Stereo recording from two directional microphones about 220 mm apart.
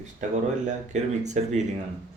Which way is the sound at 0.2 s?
35° right (ahead or behind).